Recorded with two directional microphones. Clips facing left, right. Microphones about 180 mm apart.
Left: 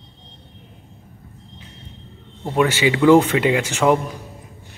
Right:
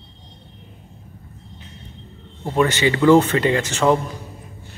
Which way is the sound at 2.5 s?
5° left (ahead or behind).